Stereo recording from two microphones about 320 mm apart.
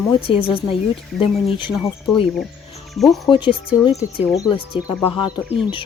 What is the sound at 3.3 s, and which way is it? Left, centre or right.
Speech, centre.